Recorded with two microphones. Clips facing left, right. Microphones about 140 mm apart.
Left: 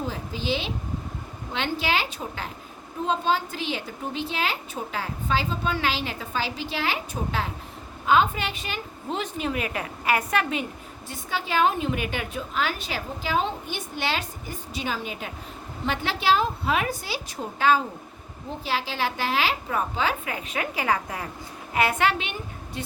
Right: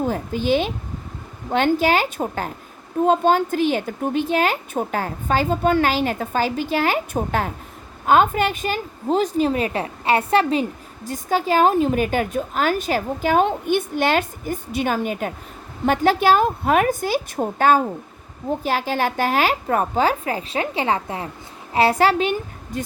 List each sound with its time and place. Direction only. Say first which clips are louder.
0.0 s a woman's voice: right 8 dB; 50° right (ahead or behind)